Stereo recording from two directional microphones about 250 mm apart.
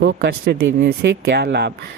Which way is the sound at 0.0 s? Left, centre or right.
Right.